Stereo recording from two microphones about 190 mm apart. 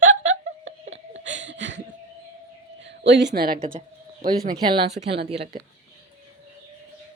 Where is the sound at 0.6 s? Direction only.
80° right.